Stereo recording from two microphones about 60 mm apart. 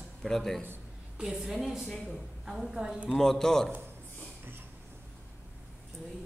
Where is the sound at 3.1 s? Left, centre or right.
Centre.